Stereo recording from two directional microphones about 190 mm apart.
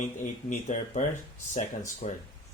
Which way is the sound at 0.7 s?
40° left (ahead or behind).